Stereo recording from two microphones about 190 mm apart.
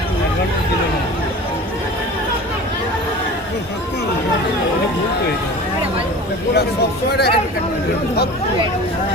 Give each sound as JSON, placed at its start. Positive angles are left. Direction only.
{"t": 7.1, "sound": "speech", "side_deg": 60}